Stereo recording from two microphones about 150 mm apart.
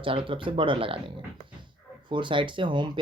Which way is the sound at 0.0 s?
35° right (ahead or behind).